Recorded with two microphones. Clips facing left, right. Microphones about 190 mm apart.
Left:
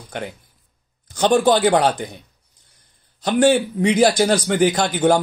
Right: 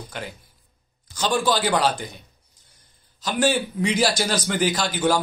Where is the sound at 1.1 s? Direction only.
55° left (ahead or behind).